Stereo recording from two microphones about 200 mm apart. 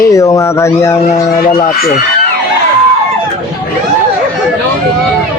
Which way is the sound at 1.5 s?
45° left (ahead or behind).